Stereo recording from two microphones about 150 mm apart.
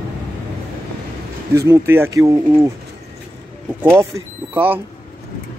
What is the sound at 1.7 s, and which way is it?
Speech, 15° right (ahead or behind).